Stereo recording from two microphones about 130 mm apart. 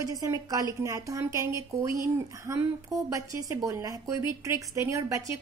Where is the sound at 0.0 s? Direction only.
30° right (ahead or behind).